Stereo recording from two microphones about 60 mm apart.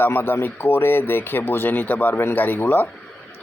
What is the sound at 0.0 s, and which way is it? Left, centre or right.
Speech, left.